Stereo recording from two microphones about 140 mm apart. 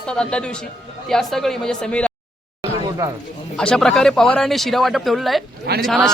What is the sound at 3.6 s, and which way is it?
Speech, 5° left (ahead or behind).